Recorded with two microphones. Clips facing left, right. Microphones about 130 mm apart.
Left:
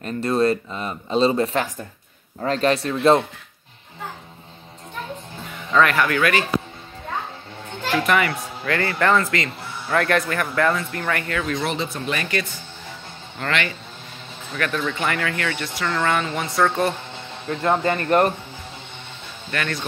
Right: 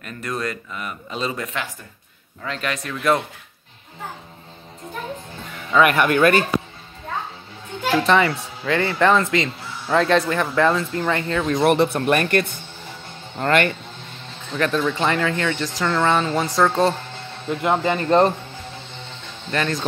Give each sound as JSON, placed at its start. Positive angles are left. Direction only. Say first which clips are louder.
{"t": 0.0, "sound": "speech", "louder": "left 8 dB", "side_deg": 30}
{"t": 5.5, "sound": "music", "louder": "right 1 dB", "side_deg": -5}
{"t": 5.9, "sound": "speech", "louder": "right 3 dB", "side_deg": -20}
{"t": 8.0, "sound": "speech", "louder": "right 3 dB", "side_deg": -25}
{"t": 11.5, "sound": "speech", "louder": "right 8 dB", "side_deg": -60}
{"t": 15.0, "sound": "speech", "louder": "right 4 dB", "side_deg": -25}
{"t": 16.2, "sound": "speech", "louder": "right 4 dB", "side_deg": -30}
{"t": 16.5, "sound": "speech", "louder": "right 1 dB", "side_deg": -15}
{"t": 19.5, "sound": "speech", "louder": "right 4 dB", "side_deg": -25}